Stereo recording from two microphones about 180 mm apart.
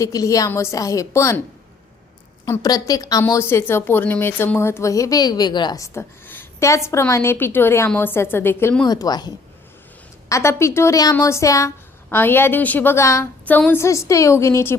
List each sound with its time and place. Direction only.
0.0 s speech: 20° left (ahead or behind)
2.5 s speech: 20° left (ahead or behind)
8.9 s a woman's voice: 20° left (ahead or behind)